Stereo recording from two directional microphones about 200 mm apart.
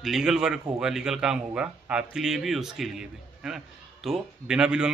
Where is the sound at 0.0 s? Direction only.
Centre (ahead or behind).